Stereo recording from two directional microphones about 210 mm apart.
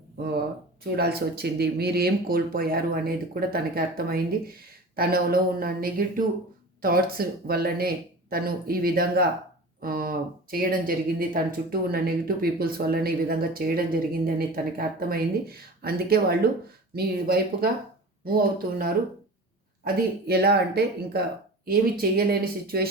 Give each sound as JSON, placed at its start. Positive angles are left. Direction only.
{"t": 0.9, "sound": "speech", "side_deg": -50}
{"t": 19.8, "sound": "speech", "side_deg": -45}